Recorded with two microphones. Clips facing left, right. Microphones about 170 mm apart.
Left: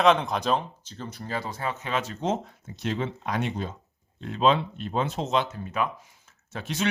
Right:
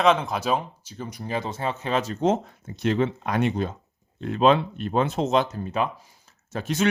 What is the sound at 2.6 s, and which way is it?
Speech, 60° right (ahead or behind).